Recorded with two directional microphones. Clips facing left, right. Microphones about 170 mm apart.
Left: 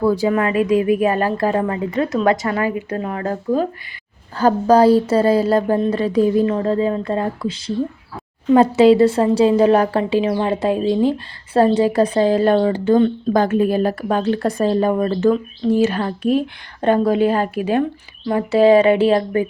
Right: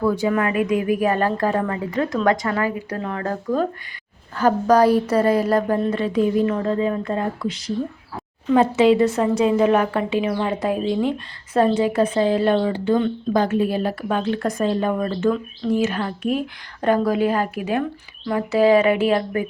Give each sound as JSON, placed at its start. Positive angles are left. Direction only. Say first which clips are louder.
{"t": 0.0, "sound": "a woman's voice", "louder": "left 3 dB", "side_deg": 30}
{"t": 4.4, "sound": "a woman's voice", "louder": "left 3 dB", "side_deg": 30}